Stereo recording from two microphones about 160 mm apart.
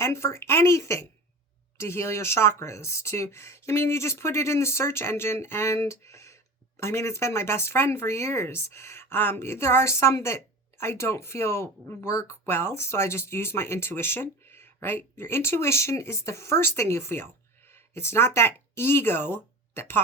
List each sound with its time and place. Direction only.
0.0 s speech: 15° left (ahead or behind)
17.7 s a sound: 15° left (ahead or behind)
18.3 s speech: 15° left (ahead or behind)